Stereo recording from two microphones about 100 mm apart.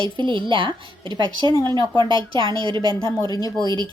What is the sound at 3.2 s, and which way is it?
Speech, 40° left (ahead or behind).